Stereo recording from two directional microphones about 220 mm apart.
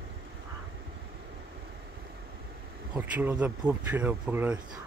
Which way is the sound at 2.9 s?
10° right (ahead or behind).